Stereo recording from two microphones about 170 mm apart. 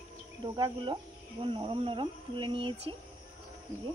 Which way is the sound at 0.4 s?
30° right (ahead or behind).